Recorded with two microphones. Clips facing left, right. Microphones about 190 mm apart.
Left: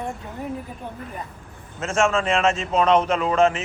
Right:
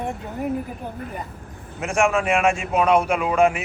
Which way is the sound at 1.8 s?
10° right (ahead or behind).